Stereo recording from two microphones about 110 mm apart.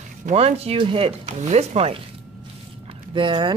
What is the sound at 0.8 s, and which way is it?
Speech, 55° right (ahead or behind).